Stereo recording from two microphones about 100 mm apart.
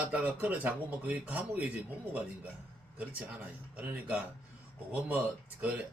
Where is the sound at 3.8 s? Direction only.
15° right (ahead or behind).